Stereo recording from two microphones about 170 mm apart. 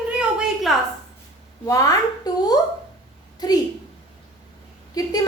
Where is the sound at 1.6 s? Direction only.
20° left (ahead or behind).